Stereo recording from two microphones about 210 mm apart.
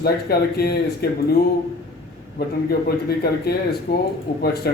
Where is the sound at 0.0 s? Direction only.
50° left (ahead or behind).